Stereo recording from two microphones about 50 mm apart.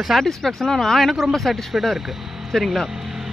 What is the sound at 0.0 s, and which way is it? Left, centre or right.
Speech, centre.